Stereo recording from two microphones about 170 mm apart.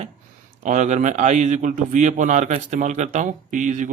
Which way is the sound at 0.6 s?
45° right (ahead or behind).